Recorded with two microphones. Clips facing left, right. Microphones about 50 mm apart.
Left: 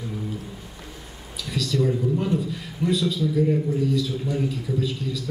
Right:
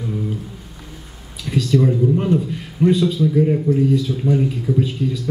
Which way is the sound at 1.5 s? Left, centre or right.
Right.